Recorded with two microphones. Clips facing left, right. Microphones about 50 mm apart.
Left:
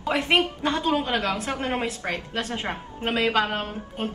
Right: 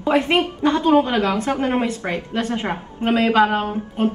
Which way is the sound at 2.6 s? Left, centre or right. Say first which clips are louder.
Right 6 dB; right.